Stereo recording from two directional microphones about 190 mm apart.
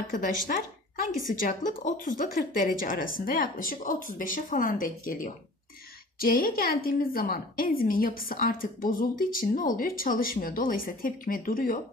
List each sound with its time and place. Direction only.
0.1 s a woman's voice: 45° left (ahead or behind)